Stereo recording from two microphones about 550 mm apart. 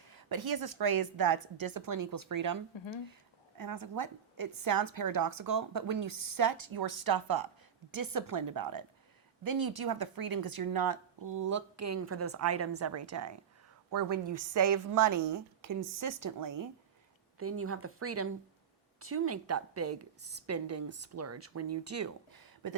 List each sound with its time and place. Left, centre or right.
0.3 s a woman's voice: right
3.6 s a woman's voice: right
17.4 s a woman's voice: right